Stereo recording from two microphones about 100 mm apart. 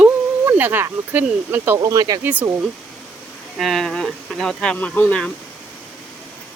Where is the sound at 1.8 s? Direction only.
40° right (ahead or behind).